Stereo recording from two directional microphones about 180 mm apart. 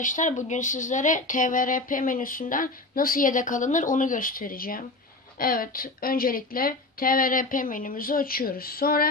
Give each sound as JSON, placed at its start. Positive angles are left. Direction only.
{"t": 0.0, "sound": "speech", "side_deg": 45}